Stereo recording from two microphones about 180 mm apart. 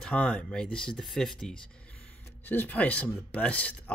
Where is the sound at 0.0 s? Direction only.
5° left (ahead or behind).